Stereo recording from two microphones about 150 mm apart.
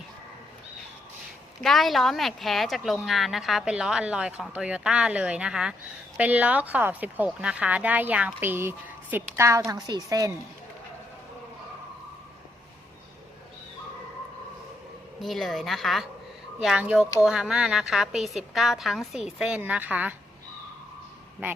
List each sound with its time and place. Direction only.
1.6 s a woman's voice: centre (ahead or behind); by 10.3 s 25° right (ahead or behind)
15.2 s speech: centre (ahead or behind)